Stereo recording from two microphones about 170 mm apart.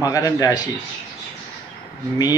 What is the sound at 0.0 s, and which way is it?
Speech, 20° left (ahead or behind).